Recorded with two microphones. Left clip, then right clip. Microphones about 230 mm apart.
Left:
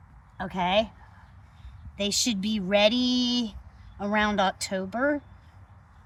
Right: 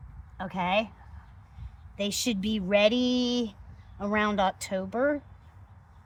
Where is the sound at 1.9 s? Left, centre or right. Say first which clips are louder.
Left 3 dB; centre.